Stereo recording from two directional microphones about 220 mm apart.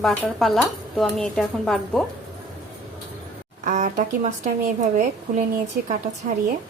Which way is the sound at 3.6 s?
35° right (ahead or behind).